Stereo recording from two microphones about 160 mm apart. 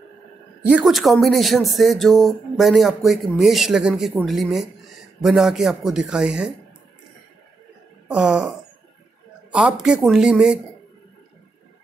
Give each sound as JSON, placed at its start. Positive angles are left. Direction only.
{"t": 0.6, "sound": "speech", "side_deg": -5}
{"t": 8.1, "sound": "speech", "side_deg": -5}